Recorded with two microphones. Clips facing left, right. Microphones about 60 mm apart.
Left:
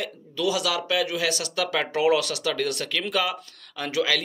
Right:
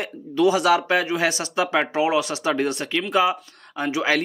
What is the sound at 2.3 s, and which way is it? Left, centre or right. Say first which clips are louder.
Speech: right 4 dB; right.